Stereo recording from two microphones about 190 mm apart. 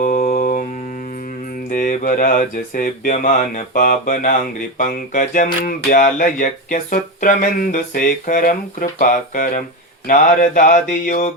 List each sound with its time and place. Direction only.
0.0 s mantra: 45° left (ahead or behind)
1.7 s speech: 45° left (ahead or behind)